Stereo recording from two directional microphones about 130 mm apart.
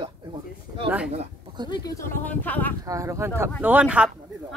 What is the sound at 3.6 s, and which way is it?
Speech, 10° right (ahead or behind).